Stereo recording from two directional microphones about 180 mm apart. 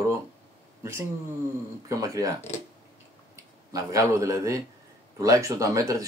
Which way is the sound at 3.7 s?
15° right (ahead or behind).